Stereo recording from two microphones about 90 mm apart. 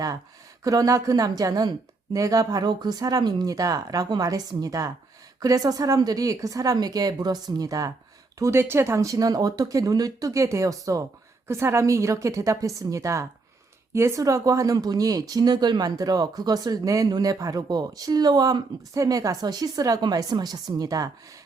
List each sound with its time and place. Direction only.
0.6 s speech: 40° right (ahead or behind)
8.4 s speech: 30° right (ahead or behind)